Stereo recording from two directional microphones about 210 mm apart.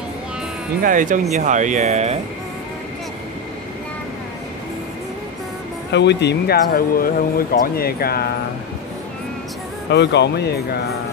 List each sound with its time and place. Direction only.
0.8 s speech: 40° right (ahead or behind)
5.9 s speech: 55° left (ahead or behind)
9.8 s speech: 50° left (ahead or behind)